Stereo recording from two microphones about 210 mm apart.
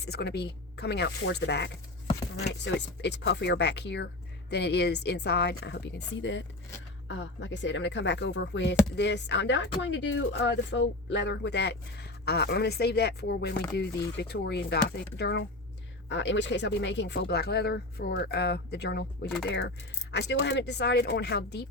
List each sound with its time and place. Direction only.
0.1 s speech: 50° left (ahead or behind)
3.0 s speech: 55° left (ahead or behind)